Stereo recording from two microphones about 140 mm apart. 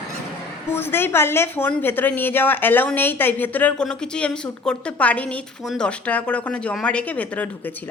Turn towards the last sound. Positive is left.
turn(degrees=10)  # may be behind; listen again after turning